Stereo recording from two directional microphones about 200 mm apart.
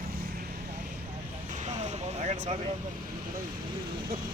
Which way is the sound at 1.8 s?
35° right (ahead or behind).